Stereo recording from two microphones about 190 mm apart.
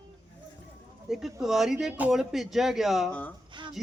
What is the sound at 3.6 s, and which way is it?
Speech, 25° right (ahead or behind).